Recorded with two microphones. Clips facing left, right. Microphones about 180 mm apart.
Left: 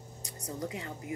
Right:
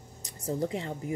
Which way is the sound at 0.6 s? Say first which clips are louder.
Right 5 dB; 30° right (ahead or behind).